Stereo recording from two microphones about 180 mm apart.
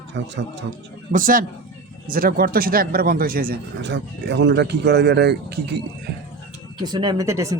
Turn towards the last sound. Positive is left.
turn(degrees=-15)  # may be behind; listen again after turning